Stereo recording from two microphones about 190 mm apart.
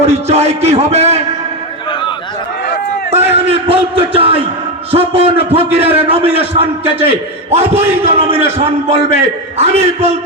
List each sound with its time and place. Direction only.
0.0 s a man's voice: 35° right (ahead or behind)
1.9 s chatter: 25° left (ahead or behind)
3.2 s a man's voice: 30° right (ahead or behind)